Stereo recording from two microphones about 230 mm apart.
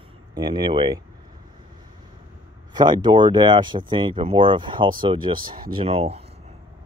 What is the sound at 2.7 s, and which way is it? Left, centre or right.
Speech, centre.